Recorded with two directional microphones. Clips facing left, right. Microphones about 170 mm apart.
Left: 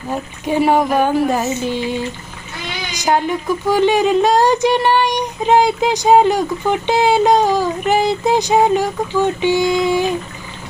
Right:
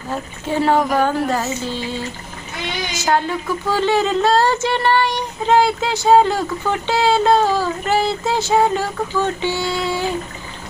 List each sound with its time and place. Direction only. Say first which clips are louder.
0.1 s speech: left 3 dB; 15° left (ahead or behind)